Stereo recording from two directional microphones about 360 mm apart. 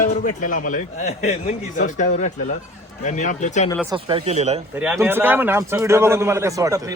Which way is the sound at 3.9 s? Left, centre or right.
Centre.